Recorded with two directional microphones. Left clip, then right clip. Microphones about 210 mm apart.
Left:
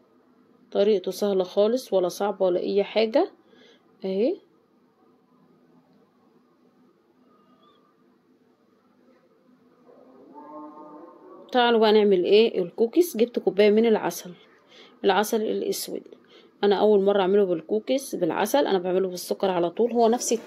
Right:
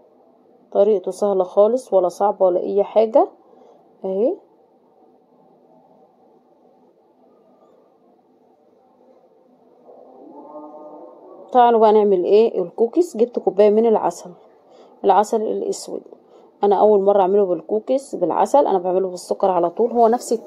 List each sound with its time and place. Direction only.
0.7 s speech: 25° left (ahead or behind)
11.4 s a woman's voice: 25° left (ahead or behind)